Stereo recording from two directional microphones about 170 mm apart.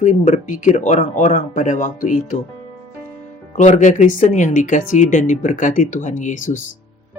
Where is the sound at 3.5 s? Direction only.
45° left (ahead or behind).